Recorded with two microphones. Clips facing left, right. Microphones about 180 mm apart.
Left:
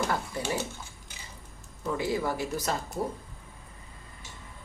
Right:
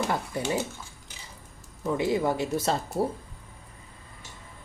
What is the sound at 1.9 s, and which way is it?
Speech, 20° right (ahead or behind).